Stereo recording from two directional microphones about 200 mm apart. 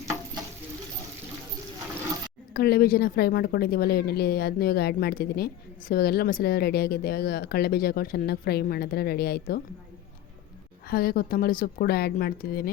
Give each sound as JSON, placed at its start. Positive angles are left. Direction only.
{"t": 2.5, "sound": "speech", "side_deg": 50}
{"t": 10.8, "sound": "speech", "side_deg": 50}